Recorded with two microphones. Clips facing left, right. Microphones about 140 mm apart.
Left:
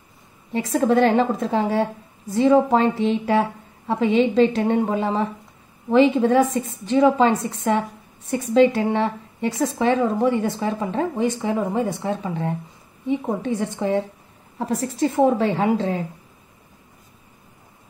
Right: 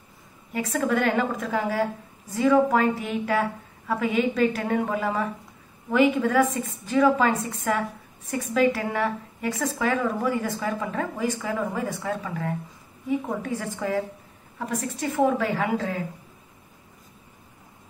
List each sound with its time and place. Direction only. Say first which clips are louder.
0.5 s a woman's voice: left 6 dB; 30° left (ahead or behind)